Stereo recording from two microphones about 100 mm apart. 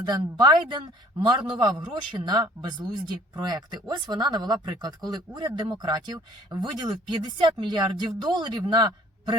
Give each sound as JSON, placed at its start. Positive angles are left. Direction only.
{"t": 0.0, "sound": "a man's voice", "side_deg": -45}